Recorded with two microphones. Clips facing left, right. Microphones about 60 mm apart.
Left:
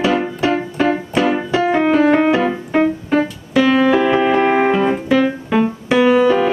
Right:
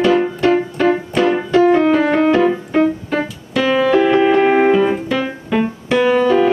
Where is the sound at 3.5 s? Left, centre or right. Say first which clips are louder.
Left 1 dB; centre.